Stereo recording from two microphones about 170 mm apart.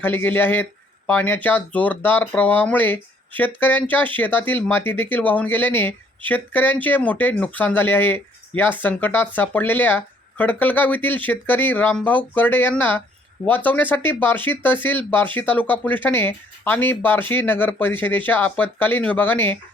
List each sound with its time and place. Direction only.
0.0 s speech: 10° left (ahead or behind)